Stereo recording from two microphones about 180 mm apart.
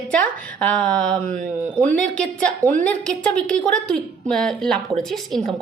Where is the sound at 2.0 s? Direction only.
5° left (ahead or behind).